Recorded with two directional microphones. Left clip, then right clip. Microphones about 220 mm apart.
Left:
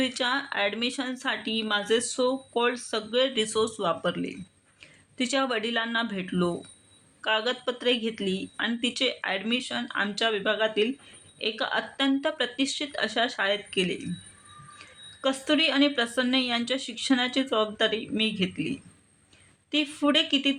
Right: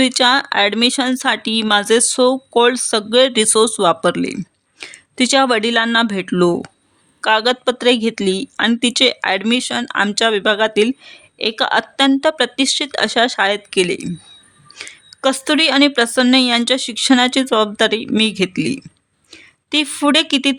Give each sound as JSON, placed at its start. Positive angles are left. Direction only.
{"t": 0.0, "sound": "a woman's voice", "side_deg": -50}